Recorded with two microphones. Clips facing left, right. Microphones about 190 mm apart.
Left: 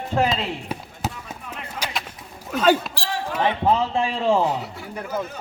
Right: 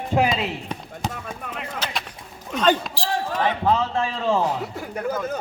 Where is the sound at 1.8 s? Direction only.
10° left (ahead or behind).